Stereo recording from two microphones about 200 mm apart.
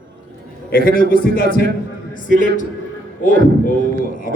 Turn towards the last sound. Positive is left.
turn(degrees=40)  # may be behind; listen again after turning